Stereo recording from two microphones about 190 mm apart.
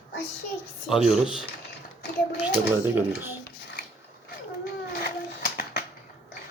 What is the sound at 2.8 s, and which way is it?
Speech, 10° right (ahead or behind).